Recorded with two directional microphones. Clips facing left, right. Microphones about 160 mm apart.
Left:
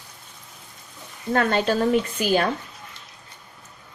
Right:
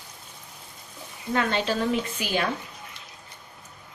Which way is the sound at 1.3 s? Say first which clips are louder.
Left 4 dB; 50° left (ahead or behind).